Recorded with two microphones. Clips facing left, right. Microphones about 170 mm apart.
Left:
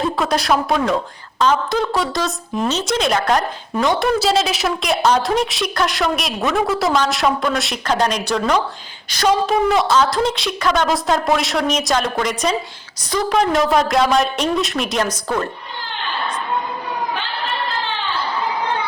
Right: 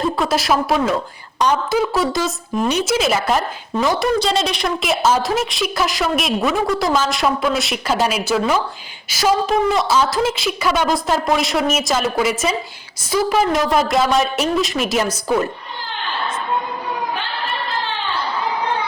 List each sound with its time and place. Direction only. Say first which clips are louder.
0.0 s speech: even; centre (ahead or behind)
1.4 s speech: left 1 dB; 15° right (ahead or behind)
1.7 s speech: right 2 dB; 5° right (ahead or behind)